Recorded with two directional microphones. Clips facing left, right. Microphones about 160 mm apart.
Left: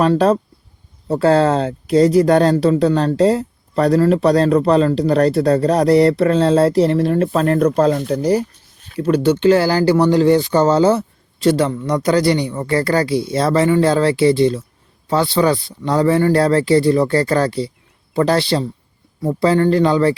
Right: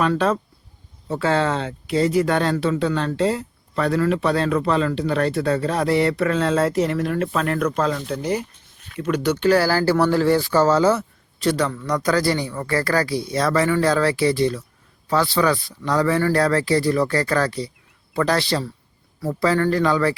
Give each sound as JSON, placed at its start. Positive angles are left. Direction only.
{"t": 0.0, "sound": "speech", "side_deg": 35}